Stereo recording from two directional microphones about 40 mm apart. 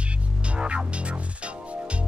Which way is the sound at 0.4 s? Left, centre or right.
Right.